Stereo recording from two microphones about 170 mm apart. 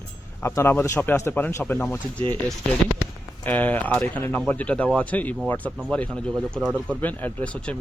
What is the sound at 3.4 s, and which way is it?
Speech, 10° left (ahead or behind).